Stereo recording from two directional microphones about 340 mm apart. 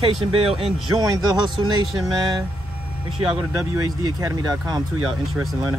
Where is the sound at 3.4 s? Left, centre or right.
Centre.